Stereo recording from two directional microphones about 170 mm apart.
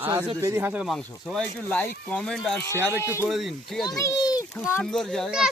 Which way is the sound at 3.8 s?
20° left (ahead or behind).